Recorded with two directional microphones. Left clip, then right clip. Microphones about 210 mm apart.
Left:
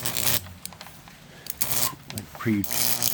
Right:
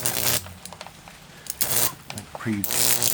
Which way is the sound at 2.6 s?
20° right (ahead or behind).